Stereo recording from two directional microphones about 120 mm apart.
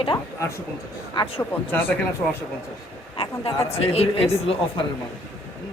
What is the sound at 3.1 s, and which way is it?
A man's voice, 50° left (ahead or behind).